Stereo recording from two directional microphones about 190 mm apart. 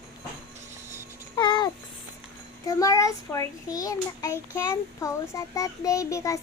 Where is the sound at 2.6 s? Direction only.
15° left (ahead or behind).